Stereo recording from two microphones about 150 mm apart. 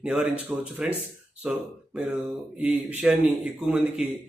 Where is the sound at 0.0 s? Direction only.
5° right (ahead or behind).